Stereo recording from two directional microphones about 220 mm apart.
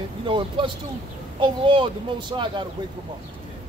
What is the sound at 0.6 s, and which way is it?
Speech, 20° right (ahead or behind).